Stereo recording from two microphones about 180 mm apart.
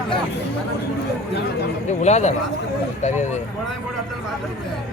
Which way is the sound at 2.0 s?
40° left (ahead or behind).